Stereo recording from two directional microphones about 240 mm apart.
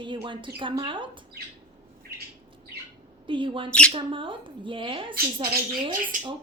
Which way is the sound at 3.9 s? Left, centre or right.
Right.